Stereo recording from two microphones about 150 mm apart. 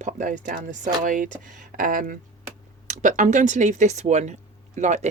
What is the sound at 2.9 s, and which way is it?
A woman's voice, 55° right (ahead or behind).